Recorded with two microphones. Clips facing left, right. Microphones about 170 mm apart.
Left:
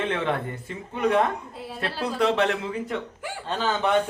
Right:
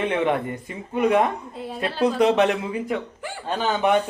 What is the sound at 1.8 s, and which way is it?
Speech, 20° right (ahead or behind).